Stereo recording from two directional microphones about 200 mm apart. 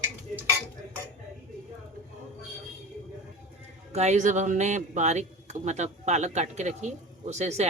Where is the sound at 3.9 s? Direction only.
35° right (ahead or behind).